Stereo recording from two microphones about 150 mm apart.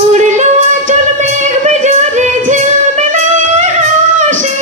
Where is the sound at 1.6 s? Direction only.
55° right (ahead or behind).